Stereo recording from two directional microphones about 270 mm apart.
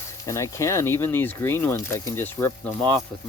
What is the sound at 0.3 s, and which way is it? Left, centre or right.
Speech, centre.